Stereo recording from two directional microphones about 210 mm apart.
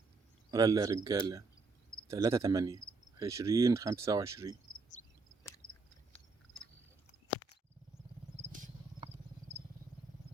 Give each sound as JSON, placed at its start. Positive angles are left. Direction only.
{"t": 0.5, "sound": "speech", "side_deg": -15}